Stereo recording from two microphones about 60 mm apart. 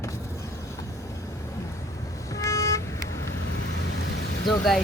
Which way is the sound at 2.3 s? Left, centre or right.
Left.